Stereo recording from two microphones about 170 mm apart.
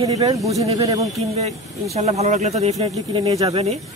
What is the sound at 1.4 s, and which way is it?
Speech, 40° right (ahead or behind).